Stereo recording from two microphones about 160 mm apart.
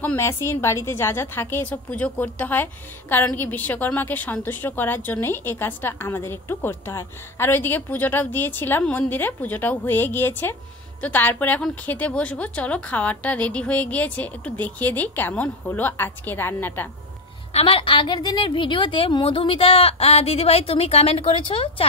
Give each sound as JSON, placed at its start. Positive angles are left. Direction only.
{"t": 0.0, "sound": "a woman's voice", "side_deg": 15}
{"t": 17.5, "sound": "a woman's voice", "side_deg": 35}